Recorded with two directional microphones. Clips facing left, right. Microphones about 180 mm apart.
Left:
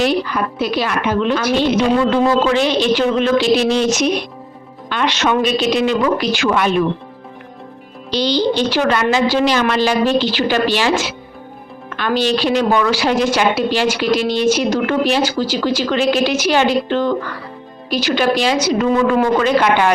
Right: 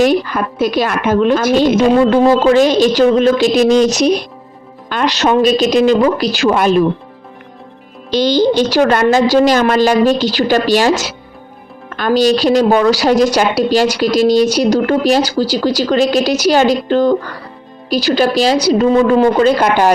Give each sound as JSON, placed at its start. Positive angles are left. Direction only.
{"t": 0.0, "sound": "a woman's voice", "side_deg": -45}
{"t": 8.1, "sound": "a woman's voice", "side_deg": -45}